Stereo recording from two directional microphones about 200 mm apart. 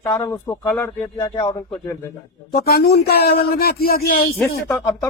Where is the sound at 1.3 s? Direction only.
25° left (ahead or behind).